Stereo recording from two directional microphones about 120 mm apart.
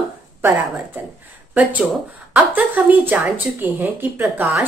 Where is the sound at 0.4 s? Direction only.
15° right (ahead or behind).